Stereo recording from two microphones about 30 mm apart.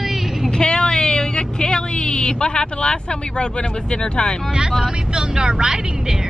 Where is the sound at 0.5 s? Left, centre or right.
Left.